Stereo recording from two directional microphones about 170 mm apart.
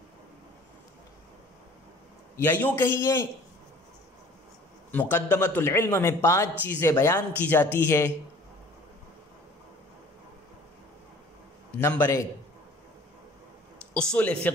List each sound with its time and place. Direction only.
2.3 s speech: 10° left (ahead or behind)
4.9 s speech: 10° left (ahead or behind)
11.8 s speech: 15° left (ahead or behind)
13.9 s speech: 5° left (ahead or behind)